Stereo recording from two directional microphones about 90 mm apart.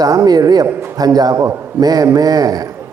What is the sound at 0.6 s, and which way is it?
Speech, 25° right (ahead or behind).